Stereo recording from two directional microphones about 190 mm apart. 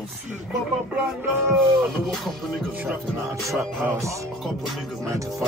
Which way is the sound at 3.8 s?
15° right (ahead or behind).